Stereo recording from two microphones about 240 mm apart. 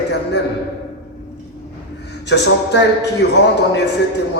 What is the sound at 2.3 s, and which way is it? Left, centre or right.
A man's voice, left.